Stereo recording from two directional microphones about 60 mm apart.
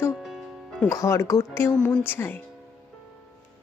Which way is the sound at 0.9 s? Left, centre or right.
Left.